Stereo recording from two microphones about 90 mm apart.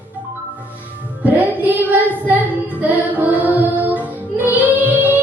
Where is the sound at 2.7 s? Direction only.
20° right (ahead or behind).